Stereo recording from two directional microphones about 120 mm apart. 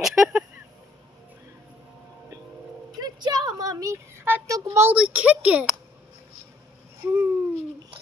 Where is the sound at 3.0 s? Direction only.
35° right (ahead or behind).